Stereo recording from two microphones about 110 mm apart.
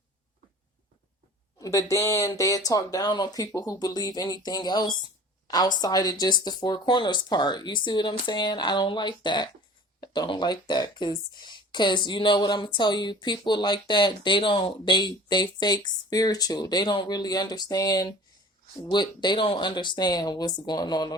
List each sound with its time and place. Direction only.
1.5 s speech: 30° left (ahead or behind)